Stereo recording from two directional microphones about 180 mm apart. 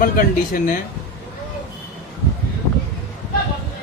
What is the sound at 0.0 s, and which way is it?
Speech, 50° left (ahead or behind).